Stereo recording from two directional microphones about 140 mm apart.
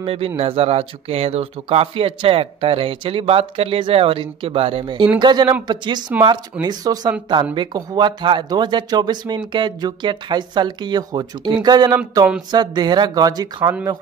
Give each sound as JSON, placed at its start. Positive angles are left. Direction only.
{"t": 0.0, "sound": "speech", "side_deg": -45}